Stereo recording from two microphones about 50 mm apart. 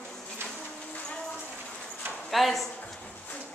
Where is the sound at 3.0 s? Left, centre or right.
Left.